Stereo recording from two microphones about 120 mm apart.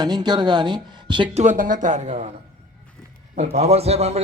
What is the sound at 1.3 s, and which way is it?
Speech, 90° right.